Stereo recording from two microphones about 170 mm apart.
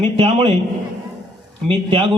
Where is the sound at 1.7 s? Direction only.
35° right (ahead or behind).